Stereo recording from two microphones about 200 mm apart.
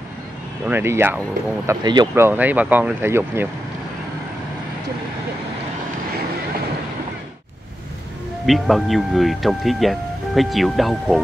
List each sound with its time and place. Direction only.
0.7 s speech: 10° right (ahead or behind)
1.7 s speech: 20° right (ahead or behind)
8.5 s speech: centre (ahead or behind)